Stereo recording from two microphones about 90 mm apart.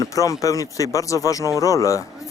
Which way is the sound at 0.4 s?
40° left (ahead or behind).